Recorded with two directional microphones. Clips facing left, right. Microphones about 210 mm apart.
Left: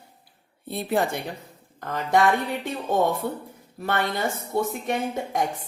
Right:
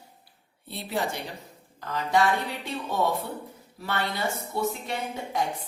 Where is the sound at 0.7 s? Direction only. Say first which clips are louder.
Left 6 dB; 50° left (ahead or behind).